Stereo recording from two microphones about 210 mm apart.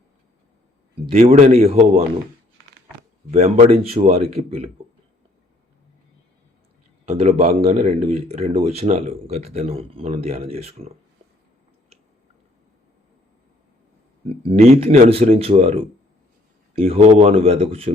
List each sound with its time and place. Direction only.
1.1 s speech: 35° right (ahead or behind)
3.3 s speech: 30° right (ahead or behind)
7.0 s speech: 30° right (ahead or behind)
14.4 s speech: 30° right (ahead or behind)